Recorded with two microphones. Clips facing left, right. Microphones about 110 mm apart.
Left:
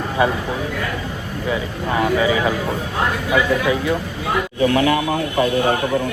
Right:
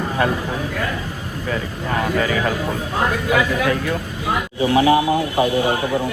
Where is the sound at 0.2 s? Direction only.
15° left (ahead or behind).